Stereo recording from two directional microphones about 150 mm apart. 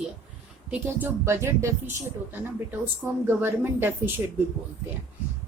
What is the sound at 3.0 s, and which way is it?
Speech, 15° right (ahead or behind).